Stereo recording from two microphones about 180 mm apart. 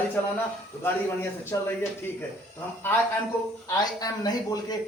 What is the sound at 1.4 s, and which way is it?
Speech, 10° left (ahead or behind).